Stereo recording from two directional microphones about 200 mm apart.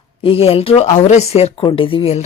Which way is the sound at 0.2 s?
30° left (ahead or behind).